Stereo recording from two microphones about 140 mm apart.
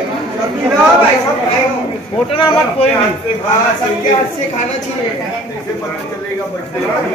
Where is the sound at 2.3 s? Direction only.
40° left (ahead or behind).